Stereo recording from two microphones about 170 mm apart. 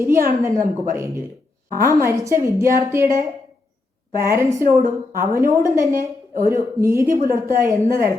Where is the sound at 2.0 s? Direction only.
15° right (ahead or behind).